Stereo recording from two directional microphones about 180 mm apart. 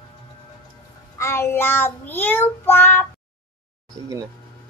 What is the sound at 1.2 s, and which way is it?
Child singing, 15° left (ahead or behind).